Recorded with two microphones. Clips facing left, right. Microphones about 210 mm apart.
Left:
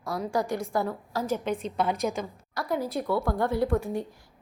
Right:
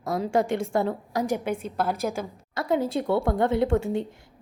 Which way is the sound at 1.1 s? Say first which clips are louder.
Right 2 dB; 15° right (ahead or behind).